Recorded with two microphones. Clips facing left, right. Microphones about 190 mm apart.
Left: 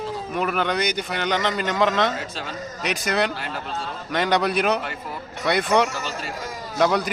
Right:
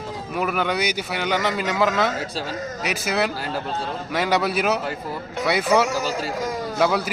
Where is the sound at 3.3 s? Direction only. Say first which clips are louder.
Right 3 dB; 40° right (ahead or behind).